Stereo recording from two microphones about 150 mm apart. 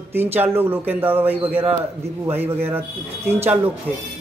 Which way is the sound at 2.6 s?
15° right (ahead or behind).